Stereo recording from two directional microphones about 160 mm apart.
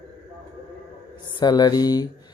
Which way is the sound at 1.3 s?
25° left (ahead or behind).